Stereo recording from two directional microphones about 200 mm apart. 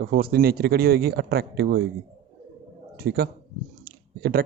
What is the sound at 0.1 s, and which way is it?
Speech, 50° right (ahead or behind).